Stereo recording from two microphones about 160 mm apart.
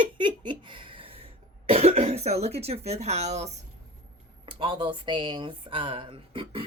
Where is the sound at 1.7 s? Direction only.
40° right (ahead or behind).